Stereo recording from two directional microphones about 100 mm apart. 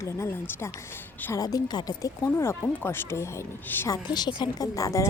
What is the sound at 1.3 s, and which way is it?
Speech, 40° left (ahead or behind).